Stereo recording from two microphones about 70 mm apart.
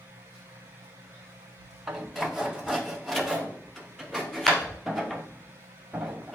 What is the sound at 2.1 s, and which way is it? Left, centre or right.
Rub, centre.